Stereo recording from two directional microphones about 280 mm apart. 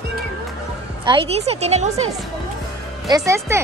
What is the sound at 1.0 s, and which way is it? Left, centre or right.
Speech, centre.